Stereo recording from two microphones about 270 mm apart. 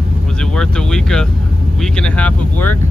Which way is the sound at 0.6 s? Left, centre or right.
Centre.